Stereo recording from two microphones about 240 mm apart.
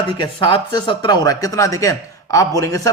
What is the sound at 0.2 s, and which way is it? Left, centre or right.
A man's voice, centre.